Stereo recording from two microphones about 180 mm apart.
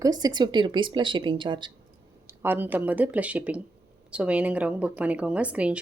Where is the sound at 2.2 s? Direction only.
10° right (ahead or behind).